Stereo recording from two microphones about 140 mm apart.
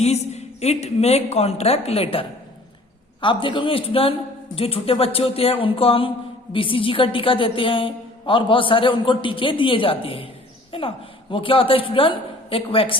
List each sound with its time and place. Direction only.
0.0 s a woman's voice: 50° left (ahead or behind)